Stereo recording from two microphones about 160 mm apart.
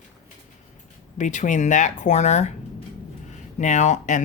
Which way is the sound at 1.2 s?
50° left (ahead or behind).